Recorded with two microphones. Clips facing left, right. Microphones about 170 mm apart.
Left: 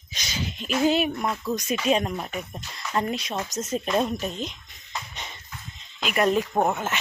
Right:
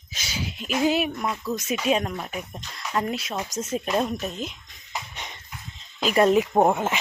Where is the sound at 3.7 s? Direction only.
5° right (ahead or behind).